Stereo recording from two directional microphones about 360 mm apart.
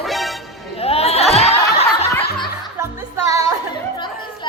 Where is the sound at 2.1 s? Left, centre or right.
Centre.